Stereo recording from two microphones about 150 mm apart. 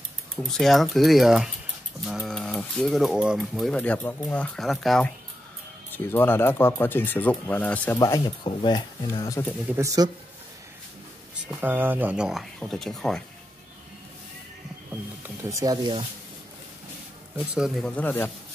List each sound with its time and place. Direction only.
0.4 s speech: centre (ahead or behind)
4.6 s speech: centre (ahead or behind)
6.0 s speech: 15° left (ahead or behind)
8.5 s speech: 30° left (ahead or behind)
9.8 s speech: 25° right (ahead or behind)
11.6 s speech: 10° right (ahead or behind); by 13.2 s 5° left (ahead or behind)
15.2 s speech: 20° right (ahead or behind)
17.4 s speech: 5° right (ahead or behind); by 18.3 s 15° left (ahead or behind)